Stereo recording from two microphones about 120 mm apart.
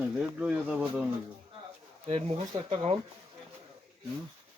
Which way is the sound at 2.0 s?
55° right (ahead or behind).